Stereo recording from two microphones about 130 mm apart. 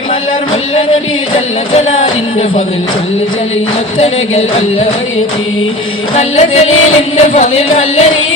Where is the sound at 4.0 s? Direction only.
50° left (ahead or behind).